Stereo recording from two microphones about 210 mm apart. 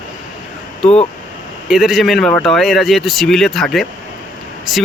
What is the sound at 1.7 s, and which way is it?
Speech, centre (ahead or behind).